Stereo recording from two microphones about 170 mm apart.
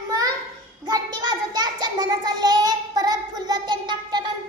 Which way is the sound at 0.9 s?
25° right (ahead or behind).